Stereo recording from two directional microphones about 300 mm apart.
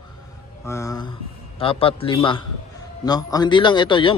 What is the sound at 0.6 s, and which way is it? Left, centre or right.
A man's voice, centre.